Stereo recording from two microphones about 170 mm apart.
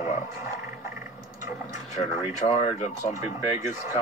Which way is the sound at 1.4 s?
20° right (ahead or behind).